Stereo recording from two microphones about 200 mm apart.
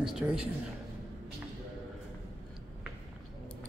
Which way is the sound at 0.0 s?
Centre (ahead or behind).